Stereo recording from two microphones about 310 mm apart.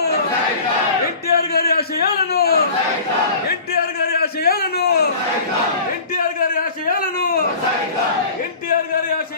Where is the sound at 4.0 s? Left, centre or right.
Left.